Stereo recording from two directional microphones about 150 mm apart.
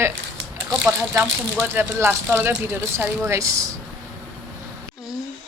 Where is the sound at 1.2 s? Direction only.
10° right (ahead or behind).